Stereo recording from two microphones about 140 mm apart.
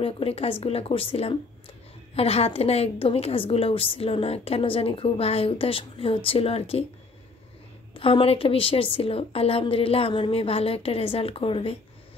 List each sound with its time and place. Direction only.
0.0 s a woman's voice: 45° left (ahead or behind)
7.9 s a woman's voice: 40° left (ahead or behind)